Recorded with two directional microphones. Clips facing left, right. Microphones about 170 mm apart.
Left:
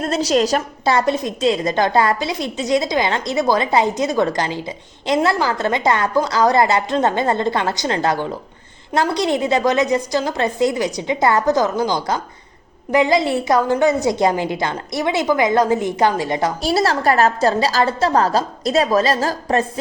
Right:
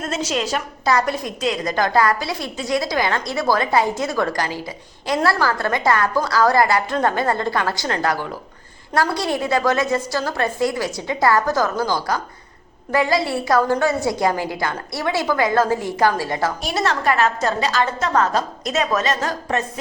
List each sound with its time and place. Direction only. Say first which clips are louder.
0.0 s a woman's voice: left 6 dB; 35° left (ahead or behind)
0.9 s a woman's voice: left 3 dB; 25° left (ahead or behind)
16.6 s a woman's voice: left 5 dB; 35° left (ahead or behind)